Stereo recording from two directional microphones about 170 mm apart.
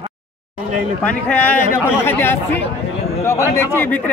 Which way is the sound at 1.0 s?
10° left (ahead or behind).